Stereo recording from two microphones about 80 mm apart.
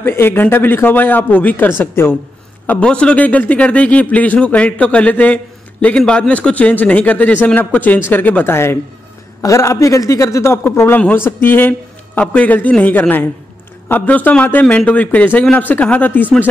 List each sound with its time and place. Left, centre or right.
0.0 s a man's voice: left
2.6 s a man's voice: centre